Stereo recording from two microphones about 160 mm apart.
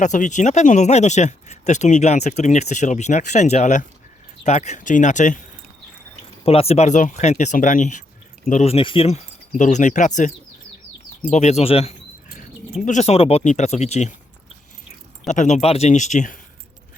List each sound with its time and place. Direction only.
0.0 s speech: 50° left (ahead or behind)
6.4 s speech: 40° left (ahead or behind)
9.6 s speech: 50° left (ahead or behind)
15.3 s speech: 50° left (ahead or behind)